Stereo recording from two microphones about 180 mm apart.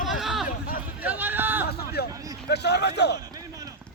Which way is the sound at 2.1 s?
20° right (ahead or behind).